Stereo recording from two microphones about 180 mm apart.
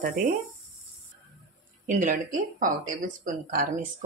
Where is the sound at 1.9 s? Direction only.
45° right (ahead or behind).